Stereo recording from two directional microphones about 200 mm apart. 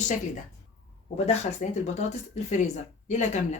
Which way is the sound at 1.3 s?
35° left (ahead or behind).